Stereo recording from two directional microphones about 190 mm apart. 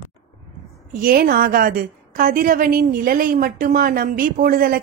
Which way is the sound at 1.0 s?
50° right (ahead or behind).